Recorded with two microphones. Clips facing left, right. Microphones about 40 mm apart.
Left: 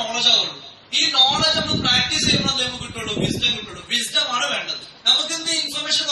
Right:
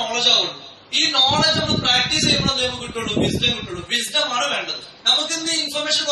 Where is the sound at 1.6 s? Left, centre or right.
Centre.